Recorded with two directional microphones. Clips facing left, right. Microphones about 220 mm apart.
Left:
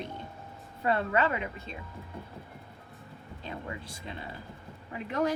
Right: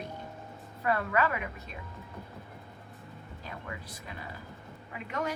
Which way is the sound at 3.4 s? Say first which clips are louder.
Left 4 dB; 25° left (ahead or behind).